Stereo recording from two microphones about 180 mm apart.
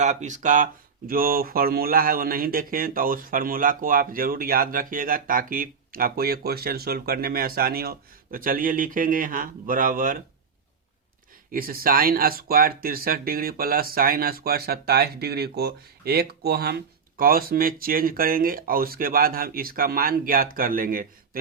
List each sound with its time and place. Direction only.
0.0 s speech: 40° right (ahead or behind)
11.5 s speech: 55° right (ahead or behind)